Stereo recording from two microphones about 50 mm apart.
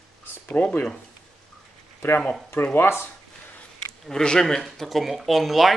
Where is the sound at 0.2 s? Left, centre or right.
Left.